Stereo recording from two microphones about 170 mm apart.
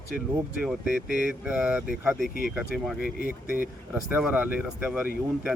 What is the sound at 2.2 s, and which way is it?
Speech, 55° left (ahead or behind).